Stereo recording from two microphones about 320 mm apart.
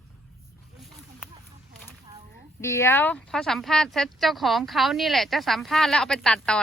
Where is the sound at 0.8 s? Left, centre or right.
Centre.